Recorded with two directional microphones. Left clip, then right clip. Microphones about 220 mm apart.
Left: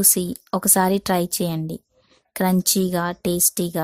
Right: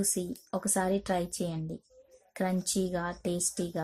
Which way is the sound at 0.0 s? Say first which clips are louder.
Left 11 dB; 40° left (ahead or behind).